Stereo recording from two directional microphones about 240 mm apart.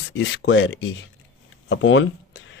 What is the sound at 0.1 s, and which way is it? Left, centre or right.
Speech, left.